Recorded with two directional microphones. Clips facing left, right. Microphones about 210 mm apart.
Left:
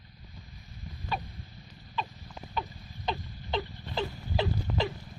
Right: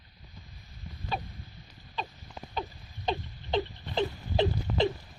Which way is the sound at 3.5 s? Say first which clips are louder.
Right 4 dB; 15° right (ahead or behind).